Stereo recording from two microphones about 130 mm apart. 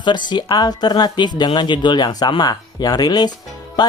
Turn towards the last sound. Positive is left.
turn(degrees=30)  # may be behind; listen again after turning